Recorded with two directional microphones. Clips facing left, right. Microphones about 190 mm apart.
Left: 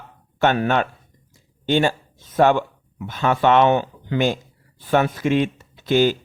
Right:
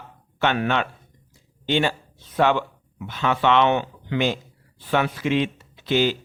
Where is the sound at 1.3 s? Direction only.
45° left (ahead or behind).